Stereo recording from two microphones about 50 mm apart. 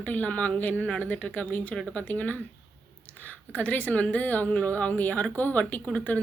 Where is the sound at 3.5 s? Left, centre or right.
Left.